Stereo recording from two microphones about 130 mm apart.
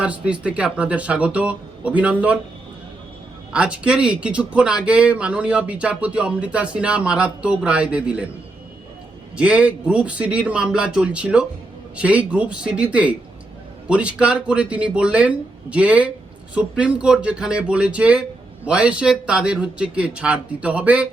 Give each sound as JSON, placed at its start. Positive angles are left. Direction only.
{"t": 0.0, "sound": "speech", "side_deg": -10}
{"t": 3.5, "sound": "speech", "side_deg": -10}
{"t": 9.4, "sound": "speech", "side_deg": -10}